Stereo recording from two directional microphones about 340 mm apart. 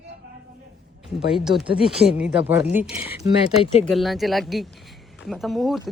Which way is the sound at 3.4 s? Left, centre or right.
Centre.